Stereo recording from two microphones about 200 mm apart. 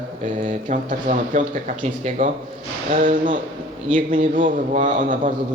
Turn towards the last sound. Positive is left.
turn(degrees=-40)  # may be behind; listen again after turning